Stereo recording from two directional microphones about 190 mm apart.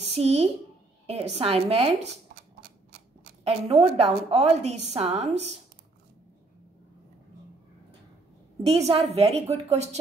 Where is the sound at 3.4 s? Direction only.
30° right (ahead or behind).